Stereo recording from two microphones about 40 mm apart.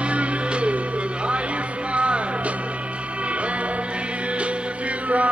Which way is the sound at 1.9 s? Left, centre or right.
Right.